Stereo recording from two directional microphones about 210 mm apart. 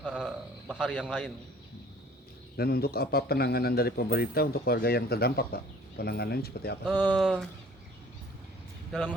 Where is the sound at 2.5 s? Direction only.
50° left (ahead or behind).